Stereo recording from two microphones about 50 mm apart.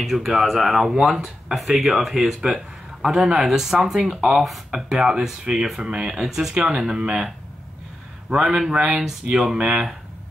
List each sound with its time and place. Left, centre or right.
0.0 s speech: centre; by 6.1 s right
6.1 s speech: centre
8.3 s speech: centre